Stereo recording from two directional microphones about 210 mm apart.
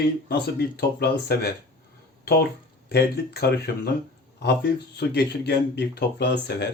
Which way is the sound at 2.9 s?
50° left (ahead or behind).